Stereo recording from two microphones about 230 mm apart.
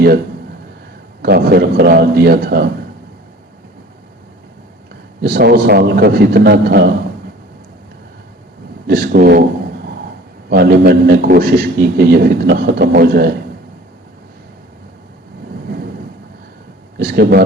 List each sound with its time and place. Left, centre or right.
1.2 s a man's voice: right
5.2 s a man's voice: right
8.9 s a man's voice: right
10.5 s a man's voice: right
17.0 s speech: right